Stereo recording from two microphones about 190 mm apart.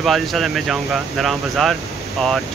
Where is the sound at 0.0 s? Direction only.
Centre (ahead or behind).